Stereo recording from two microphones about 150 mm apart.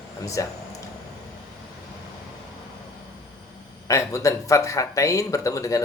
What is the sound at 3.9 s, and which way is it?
Speech, 20° left (ahead or behind).